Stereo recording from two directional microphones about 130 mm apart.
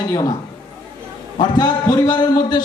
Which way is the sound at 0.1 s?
30° left (ahead or behind).